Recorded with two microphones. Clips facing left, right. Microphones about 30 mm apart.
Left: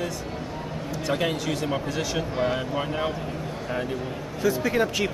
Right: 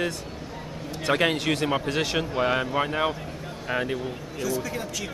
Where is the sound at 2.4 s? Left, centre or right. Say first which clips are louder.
Right 3 dB; right.